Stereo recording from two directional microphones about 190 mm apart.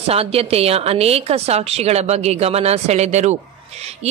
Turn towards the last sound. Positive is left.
turn(degrees=-35)  # may be behind; listen again after turning